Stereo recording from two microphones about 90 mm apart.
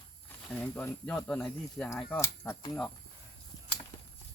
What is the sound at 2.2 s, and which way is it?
Speech, 25° left (ahead or behind).